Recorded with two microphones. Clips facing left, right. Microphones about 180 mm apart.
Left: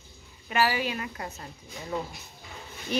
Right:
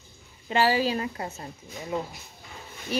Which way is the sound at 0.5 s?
30° right (ahead or behind).